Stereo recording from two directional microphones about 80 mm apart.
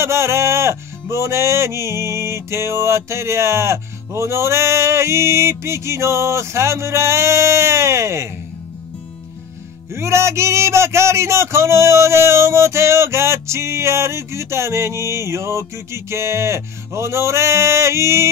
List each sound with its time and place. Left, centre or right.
0.0 s speech: right
9.9 s speech: right